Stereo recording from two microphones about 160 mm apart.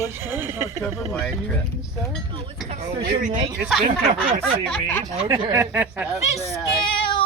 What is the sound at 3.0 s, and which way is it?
Speech, 60° right (ahead or behind).